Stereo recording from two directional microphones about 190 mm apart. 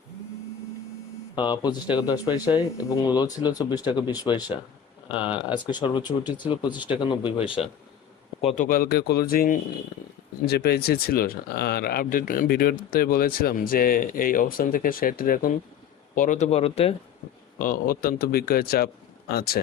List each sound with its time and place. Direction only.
1.4 s a man's voice: 20° left (ahead or behind)
8.6 s speech: 50° left (ahead or behind); by 16.9 s 30° left (ahead or behind)
17.6 s speech: 50° left (ahead or behind)